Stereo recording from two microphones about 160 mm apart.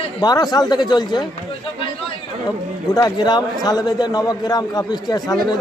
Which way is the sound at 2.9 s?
25° left (ahead or behind).